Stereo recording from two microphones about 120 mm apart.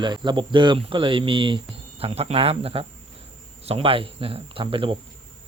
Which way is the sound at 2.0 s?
55° right (ahead or behind).